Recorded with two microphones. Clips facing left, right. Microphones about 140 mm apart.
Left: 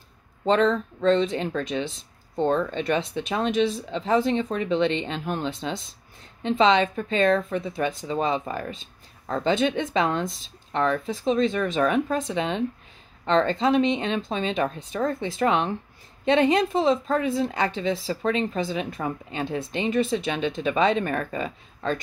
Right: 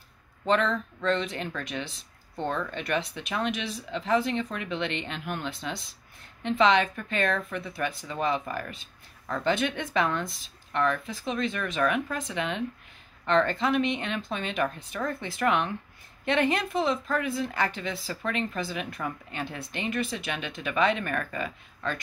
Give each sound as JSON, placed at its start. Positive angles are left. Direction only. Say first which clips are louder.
{"t": 0.5, "sound": "speech", "louder": "left 5 dB", "side_deg": 30}